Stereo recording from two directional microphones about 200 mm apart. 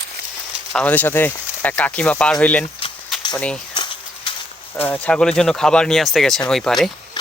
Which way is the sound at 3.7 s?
25° left (ahead or behind).